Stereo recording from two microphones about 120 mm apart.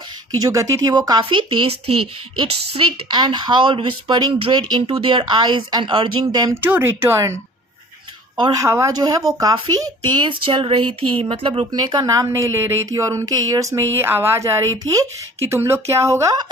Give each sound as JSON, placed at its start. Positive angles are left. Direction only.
{"t": 0.3, "sound": "speech", "side_deg": -30}
{"t": 6.5, "sound": "speech", "side_deg": -15}
{"t": 8.5, "sound": "speech", "side_deg": -25}
{"t": 11.7, "sound": "speech", "side_deg": -35}